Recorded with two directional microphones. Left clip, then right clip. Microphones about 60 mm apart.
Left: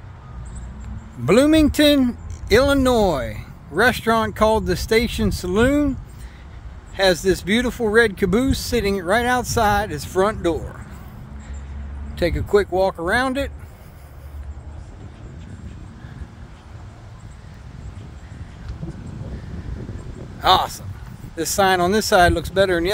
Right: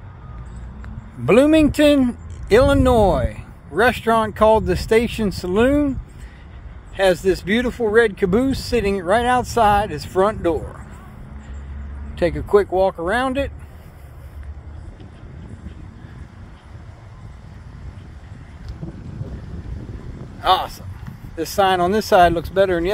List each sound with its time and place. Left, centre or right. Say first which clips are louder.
1.2 s speech: right 1 dB; centre
2.7 s speech: right 2 dB; left
3.1 s speech: right 3 dB; centre
7.0 s speech: right 1 dB; centre
10.1 s speech: right 2 dB; left
12.2 s speech: right 2 dB; centre
20.3 s speech: left 1 dB; left